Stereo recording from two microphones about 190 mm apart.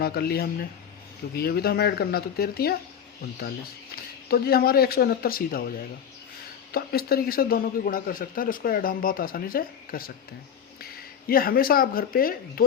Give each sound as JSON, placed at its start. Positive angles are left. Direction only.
{"t": 0.0, "sound": "a man's voice", "side_deg": 55}
{"t": 3.9, "sound": "a man's voice", "side_deg": 55}